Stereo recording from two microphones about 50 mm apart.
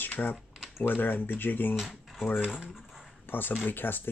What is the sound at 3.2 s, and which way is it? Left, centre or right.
Speech, left.